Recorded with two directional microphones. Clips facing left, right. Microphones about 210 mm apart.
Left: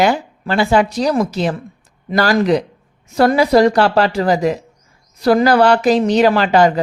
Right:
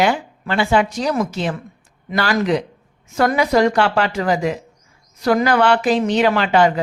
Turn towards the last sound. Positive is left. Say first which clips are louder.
# left 3 dB
turn(degrees=40)  # may be behind; listen again after turning